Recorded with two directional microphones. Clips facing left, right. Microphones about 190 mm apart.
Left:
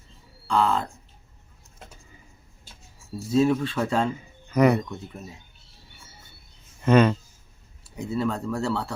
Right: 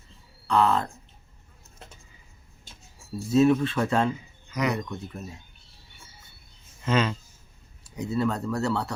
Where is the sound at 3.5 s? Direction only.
10° left (ahead or behind).